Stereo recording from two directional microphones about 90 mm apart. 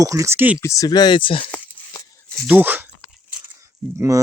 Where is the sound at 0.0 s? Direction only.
35° right (ahead or behind).